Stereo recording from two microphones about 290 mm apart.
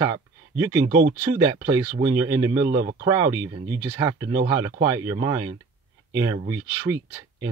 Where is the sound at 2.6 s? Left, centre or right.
Right.